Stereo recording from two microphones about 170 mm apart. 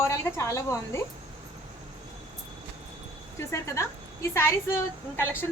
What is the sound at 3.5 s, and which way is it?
Speech, 15° left (ahead or behind).